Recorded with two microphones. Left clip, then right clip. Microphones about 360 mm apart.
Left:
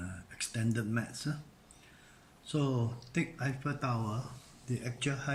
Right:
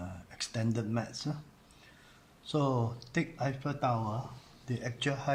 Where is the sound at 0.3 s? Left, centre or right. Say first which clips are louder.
Right 1 dB; centre.